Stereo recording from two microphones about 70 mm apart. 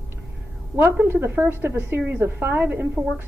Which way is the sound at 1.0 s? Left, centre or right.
Right.